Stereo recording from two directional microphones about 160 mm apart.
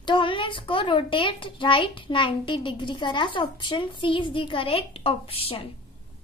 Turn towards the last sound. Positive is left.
turn(degrees=35)  # may be behind; listen again after turning